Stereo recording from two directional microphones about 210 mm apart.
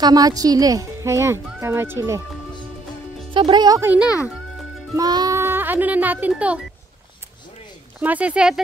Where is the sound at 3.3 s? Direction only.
20° right (ahead or behind); by 6.6 s 5° right (ahead or behind).